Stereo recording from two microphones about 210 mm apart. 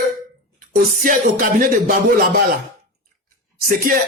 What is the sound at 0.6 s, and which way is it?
Music, 40° right (ahead or behind).